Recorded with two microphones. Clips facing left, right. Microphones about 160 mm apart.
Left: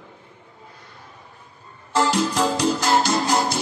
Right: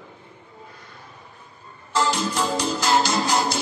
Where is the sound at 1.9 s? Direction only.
75° left (ahead or behind); by 3.6 s 55° left (ahead or behind).